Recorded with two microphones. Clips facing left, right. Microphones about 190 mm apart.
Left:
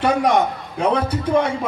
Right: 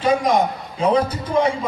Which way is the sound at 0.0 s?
65° left (ahead or behind).